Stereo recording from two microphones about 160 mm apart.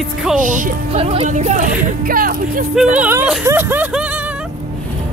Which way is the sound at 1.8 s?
65° right (ahead or behind).